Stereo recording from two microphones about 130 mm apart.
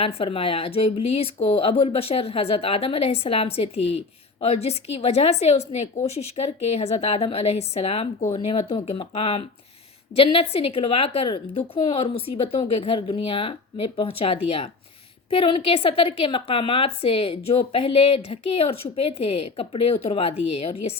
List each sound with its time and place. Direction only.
0.0 s speech: 45° left (ahead or behind)